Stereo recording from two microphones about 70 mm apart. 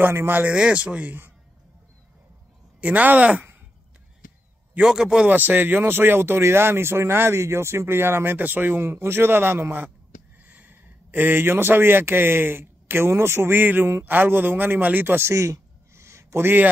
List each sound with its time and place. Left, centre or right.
0.0 s speech: right
0.5 s speech: centre
2.8 s speech: right
4.7 s speech: centre
5.3 s speech: right
15.3 s a sound: right